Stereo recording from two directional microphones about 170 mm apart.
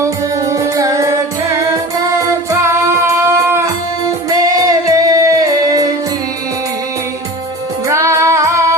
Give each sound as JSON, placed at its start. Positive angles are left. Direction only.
{"t": 0.0, "sound": "music", "side_deg": -20}
{"t": 7.9, "sound": "music", "side_deg": -20}